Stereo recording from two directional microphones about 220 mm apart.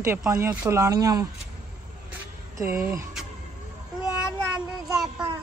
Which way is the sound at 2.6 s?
10° right (ahead or behind).